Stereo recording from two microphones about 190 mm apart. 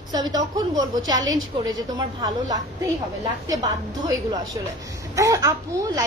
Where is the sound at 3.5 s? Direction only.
20° right (ahead or behind).